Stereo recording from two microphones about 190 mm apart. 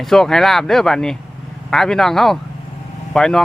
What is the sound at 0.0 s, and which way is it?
Speech, centre (ahead or behind).